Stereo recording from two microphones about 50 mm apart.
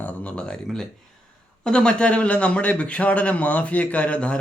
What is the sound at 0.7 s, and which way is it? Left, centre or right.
Speech, centre.